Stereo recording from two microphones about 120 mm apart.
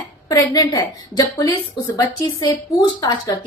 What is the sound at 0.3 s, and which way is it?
A woman's voice, 30° left (ahead or behind).